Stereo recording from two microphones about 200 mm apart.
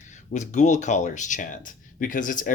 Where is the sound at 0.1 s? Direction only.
35° left (ahead or behind).